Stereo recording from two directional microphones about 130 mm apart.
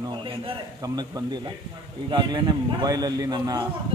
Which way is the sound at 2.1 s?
40° right (ahead or behind).